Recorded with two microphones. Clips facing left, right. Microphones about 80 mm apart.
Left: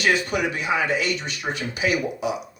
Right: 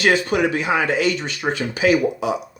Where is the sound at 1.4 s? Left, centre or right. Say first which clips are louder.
Right 6 dB; right.